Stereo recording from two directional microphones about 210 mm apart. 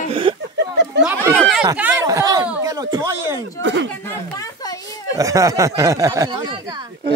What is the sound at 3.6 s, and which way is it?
Speech, 60° right (ahead or behind).